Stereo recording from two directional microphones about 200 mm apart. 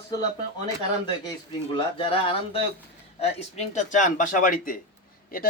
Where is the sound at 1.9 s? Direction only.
25° left (ahead or behind); by 5.5 s 45° left (ahead or behind).